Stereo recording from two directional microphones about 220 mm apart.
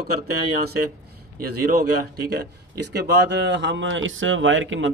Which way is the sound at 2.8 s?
50° right (ahead or behind).